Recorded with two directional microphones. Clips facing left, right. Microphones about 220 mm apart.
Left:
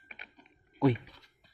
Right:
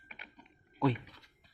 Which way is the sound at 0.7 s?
15° left (ahead or behind).